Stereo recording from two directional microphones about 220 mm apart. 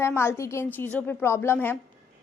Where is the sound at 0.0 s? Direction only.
10° left (ahead or behind).